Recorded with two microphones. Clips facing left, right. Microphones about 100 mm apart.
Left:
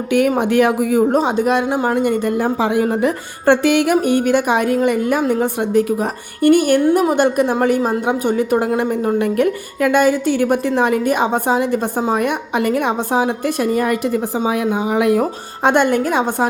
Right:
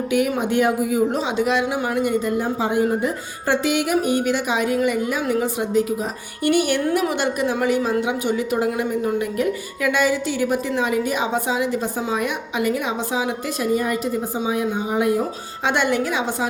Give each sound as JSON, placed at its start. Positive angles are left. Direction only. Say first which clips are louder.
{"t": 0.1, "sound": "speech", "louder": "left 6 dB", "side_deg": 60}
{"t": 1.1, "sound": "a woman's voice", "louder": "left 5 dB", "side_deg": 45}
{"t": 2.0, "sound": "speech", "louder": "left 4 dB", "side_deg": 60}
{"t": 2.8, "sound": "a woman's voice", "louder": "left 4 dB", "side_deg": 65}
{"t": 15.6, "sound": "a woman's voice", "louder": "left 6 dB", "side_deg": 50}